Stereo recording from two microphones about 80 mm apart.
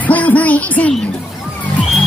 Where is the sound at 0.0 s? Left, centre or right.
Centre.